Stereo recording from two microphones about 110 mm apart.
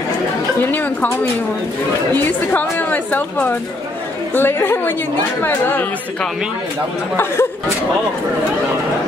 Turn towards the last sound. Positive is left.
turn(degrees=20)  # may be behind; listen again after turning